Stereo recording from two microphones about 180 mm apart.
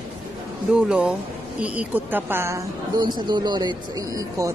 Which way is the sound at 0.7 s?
5° right (ahead or behind).